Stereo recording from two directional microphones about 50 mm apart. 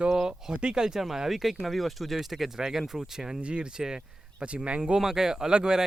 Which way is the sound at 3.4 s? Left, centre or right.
Right.